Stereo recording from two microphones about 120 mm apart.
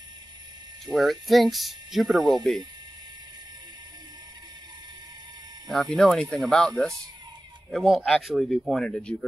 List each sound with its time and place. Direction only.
0.9 s speech: 20° right (ahead or behind)
1.2 s speech: centre (ahead or behind)
5.7 s speech: 5° left (ahead or behind)
7.7 s speech: centre (ahead or behind)